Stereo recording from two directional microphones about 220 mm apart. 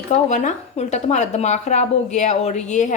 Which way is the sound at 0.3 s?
30° left (ahead or behind).